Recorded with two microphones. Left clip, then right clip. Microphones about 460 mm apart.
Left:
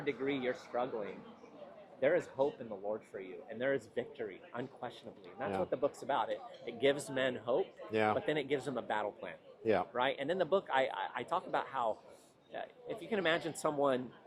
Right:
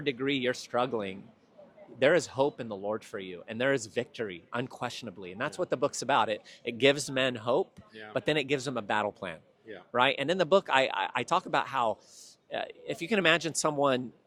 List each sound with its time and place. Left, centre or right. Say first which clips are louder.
0.0 s speech: right 6 dB; right
2.0 s speech: right 7 dB; right